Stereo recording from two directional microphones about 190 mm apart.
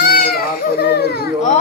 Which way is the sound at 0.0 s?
55° left (ahead or behind).